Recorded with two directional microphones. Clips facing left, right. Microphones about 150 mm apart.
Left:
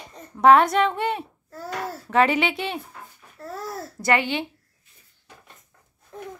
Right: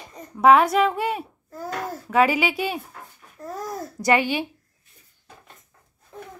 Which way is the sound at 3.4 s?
15° right (ahead or behind).